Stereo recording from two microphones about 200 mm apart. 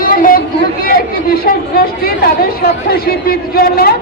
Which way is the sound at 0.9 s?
50° left (ahead or behind).